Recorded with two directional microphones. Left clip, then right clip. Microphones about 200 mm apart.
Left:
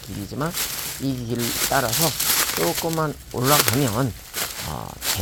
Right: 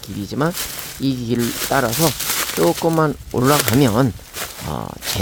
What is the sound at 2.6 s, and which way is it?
Speech, 40° right (ahead or behind).